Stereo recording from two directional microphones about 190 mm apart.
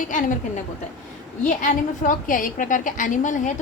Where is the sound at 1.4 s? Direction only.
45° left (ahead or behind).